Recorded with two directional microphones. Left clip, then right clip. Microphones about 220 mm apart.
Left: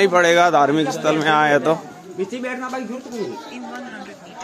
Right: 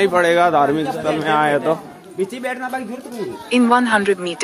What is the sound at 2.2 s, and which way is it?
Speech, 45° right (ahead or behind).